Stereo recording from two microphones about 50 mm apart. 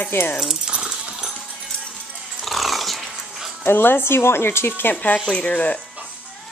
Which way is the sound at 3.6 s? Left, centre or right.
Left.